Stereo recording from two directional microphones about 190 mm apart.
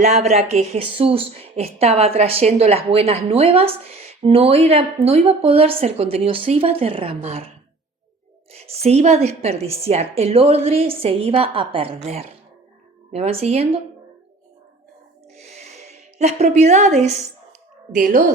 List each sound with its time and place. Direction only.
0.0 s a woman's voice: 35° right (ahead or behind)
8.5 s a woman's voice: 35° right (ahead or behind)
13.1 s a woman's voice: 35° right (ahead or behind)
15.4 s a sound: 35° right (ahead or behind)